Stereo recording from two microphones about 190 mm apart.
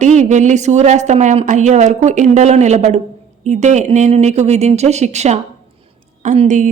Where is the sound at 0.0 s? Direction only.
40° right (ahead or behind).